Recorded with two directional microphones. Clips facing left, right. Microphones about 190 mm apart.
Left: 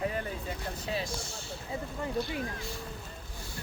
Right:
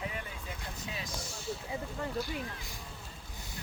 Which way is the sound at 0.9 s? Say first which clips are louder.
Left 6 dB; 30° left (ahead or behind).